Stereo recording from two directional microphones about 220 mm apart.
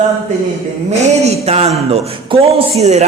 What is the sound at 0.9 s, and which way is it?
Speech, 30° right (ahead or behind).